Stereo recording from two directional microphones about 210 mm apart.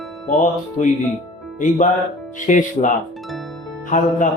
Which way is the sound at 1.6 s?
35° left (ahead or behind).